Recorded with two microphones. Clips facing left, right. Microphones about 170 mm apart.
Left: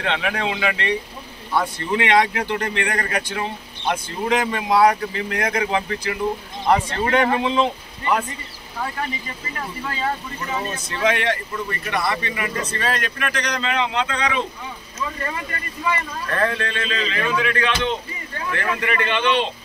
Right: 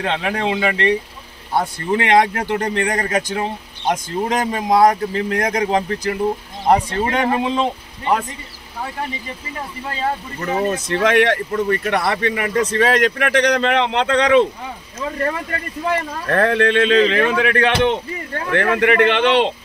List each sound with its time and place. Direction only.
0.0 s speech: 40° right (ahead or behind)
10.4 s speech: 60° right (ahead or behind)
15.9 s speech: 65° right (ahead or behind)